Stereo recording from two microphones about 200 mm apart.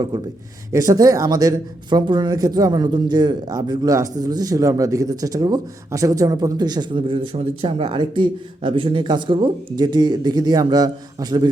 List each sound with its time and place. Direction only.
0.1 s speech: 20° right (ahead or behind)